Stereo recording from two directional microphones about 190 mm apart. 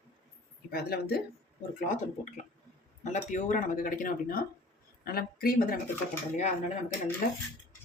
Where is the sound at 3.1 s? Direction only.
40° left (ahead or behind).